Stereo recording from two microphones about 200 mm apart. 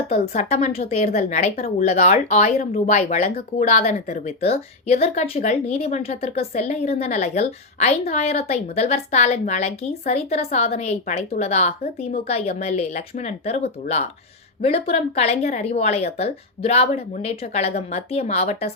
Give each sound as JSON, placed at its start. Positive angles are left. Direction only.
{"t": 0.1, "sound": "a woman's voice", "side_deg": 35}